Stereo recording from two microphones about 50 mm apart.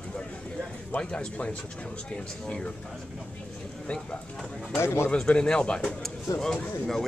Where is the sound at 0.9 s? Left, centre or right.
Left.